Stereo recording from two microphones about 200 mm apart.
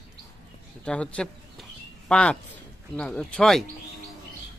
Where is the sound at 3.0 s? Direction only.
5° left (ahead or behind).